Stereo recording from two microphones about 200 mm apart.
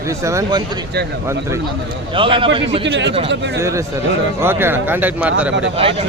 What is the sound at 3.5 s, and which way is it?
Speech, 15° right (ahead or behind).